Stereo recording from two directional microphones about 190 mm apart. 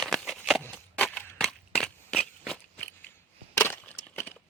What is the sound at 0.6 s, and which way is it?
Crushing, 10° left (ahead or behind).